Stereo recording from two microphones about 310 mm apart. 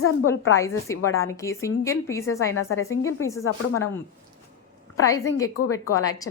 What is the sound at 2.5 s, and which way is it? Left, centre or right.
Speech, left.